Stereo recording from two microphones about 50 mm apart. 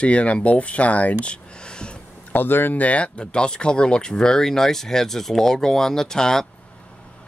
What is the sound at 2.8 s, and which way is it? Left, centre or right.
Speech, left.